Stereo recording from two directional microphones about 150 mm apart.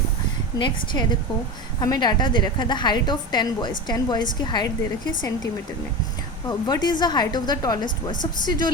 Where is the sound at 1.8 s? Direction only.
25° left (ahead or behind).